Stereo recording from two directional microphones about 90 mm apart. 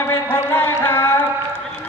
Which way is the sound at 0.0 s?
25° left (ahead or behind).